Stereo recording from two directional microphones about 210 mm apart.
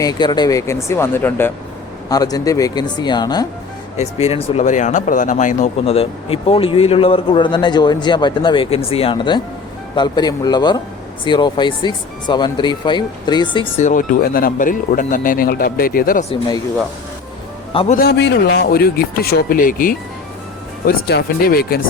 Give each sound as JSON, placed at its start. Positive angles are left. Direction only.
{"t": 0.0, "sound": "speech", "side_deg": 20}
{"t": 3.9, "sound": "speech", "side_deg": 30}
{"t": 13.8, "sound": "speech", "side_deg": 40}
{"t": 17.9, "sound": "speech", "side_deg": 50}